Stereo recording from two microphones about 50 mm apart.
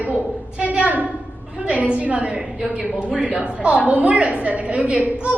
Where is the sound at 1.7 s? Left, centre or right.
Right.